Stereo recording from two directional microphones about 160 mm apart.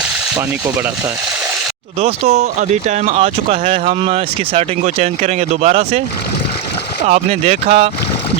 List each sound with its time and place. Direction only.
2.0 s speech: 40° right (ahead or behind)
7.0 s speech: 45° right (ahead or behind)